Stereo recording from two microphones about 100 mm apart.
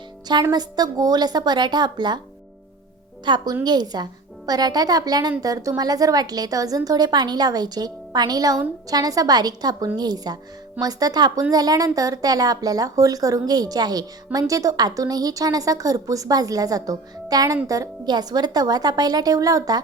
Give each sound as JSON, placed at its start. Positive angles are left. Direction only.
{"t": 0.5, "sound": "speech", "side_deg": -45}
{"t": 3.2, "sound": "a woman's voice", "side_deg": -45}